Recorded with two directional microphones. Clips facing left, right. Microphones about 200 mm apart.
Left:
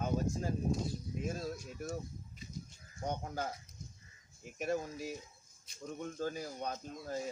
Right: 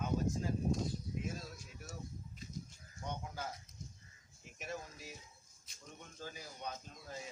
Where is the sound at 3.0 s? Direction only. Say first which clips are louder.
Left 6 dB; 40° left (ahead or behind).